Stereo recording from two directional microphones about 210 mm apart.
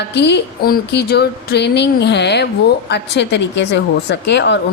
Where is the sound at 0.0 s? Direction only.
55° left (ahead or behind).